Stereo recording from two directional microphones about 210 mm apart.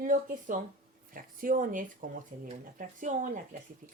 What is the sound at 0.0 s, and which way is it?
Speech, 40° right (ahead or behind).